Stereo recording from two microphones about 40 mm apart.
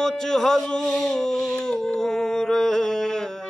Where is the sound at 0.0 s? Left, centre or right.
Centre.